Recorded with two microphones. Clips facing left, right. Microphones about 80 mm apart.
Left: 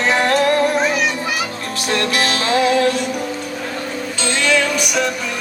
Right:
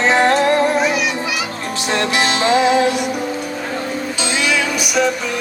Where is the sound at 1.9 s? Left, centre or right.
Right.